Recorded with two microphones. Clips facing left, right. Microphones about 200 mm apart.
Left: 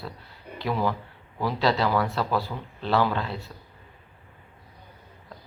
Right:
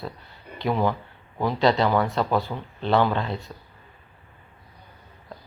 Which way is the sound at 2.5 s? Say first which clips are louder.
Right 3 dB; 15° right (ahead or behind).